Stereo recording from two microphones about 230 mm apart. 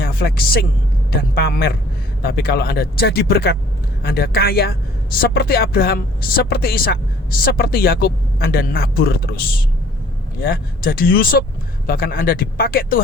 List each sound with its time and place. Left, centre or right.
0.0 s speech: left
10.4 s speech: left